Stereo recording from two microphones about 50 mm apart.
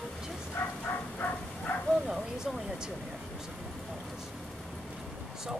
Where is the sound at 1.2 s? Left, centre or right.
Left.